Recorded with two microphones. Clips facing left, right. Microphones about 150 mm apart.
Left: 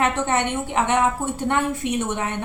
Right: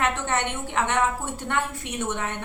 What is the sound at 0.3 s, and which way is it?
A woman's voice, 15° left (ahead or behind).